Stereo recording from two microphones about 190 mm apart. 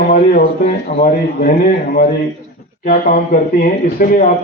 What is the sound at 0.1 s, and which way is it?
A man's voice, 45° left (ahead or behind).